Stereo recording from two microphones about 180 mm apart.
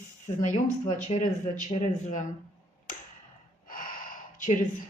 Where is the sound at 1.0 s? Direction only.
35° left (ahead or behind).